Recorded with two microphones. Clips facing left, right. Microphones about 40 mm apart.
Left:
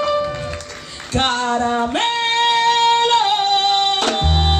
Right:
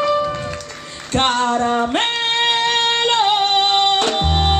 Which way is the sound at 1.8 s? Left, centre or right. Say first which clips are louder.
Even; right.